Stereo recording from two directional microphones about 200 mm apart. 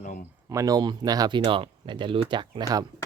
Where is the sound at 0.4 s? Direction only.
15° right (ahead or behind).